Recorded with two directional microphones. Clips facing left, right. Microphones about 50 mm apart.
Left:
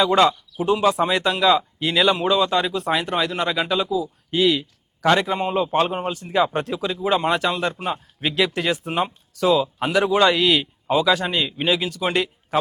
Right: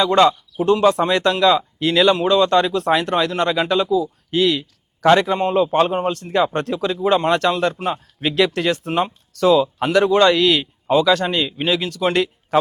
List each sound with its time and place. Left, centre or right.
0.0 s speech: centre